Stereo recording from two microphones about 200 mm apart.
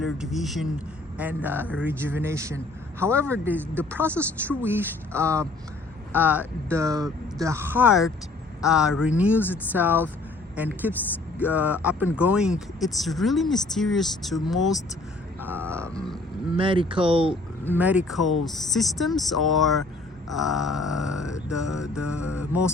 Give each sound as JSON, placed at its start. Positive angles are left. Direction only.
{"t": 0.0, "sound": "speech", "side_deg": 0}
{"t": 16.6, "sound": "speech", "side_deg": -25}
{"t": 17.7, "sound": "speech", "side_deg": -5}